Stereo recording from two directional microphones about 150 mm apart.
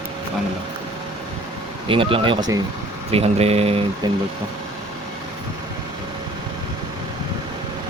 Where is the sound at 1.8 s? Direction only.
35° right (ahead or behind).